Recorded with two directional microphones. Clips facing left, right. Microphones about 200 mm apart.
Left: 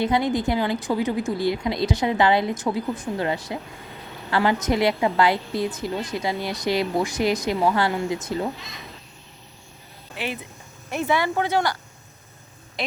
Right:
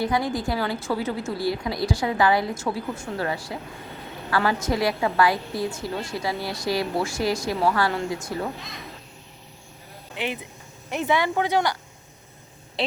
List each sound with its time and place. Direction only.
0.0 s a woman's voice: 20° left (ahead or behind)
10.2 s speech: 20° right (ahead or behind)